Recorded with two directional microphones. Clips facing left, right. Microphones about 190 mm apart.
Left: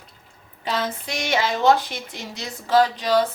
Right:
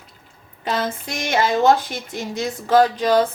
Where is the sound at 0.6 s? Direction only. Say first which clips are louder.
Right 2 dB; 50° right (ahead or behind).